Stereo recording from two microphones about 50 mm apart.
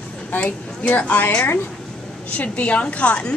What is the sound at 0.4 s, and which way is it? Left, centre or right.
A woman's voice, left.